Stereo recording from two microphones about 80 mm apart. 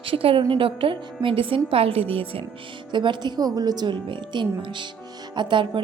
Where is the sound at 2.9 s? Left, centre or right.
Right.